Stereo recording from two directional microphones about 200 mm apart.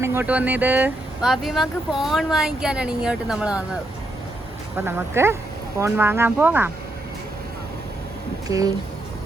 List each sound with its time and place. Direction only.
0.0 s speech: 10° right (ahead or behind)
4.9 s speech: 10° right (ahead or behind)
8.4 s speech: 15° right (ahead or behind)